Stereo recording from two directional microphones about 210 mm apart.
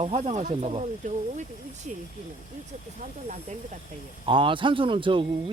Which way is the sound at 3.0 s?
35° right (ahead or behind).